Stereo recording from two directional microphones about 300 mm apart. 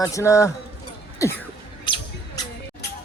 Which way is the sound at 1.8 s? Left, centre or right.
Centre.